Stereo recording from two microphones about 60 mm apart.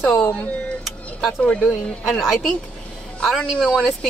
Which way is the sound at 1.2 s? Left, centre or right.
Centre.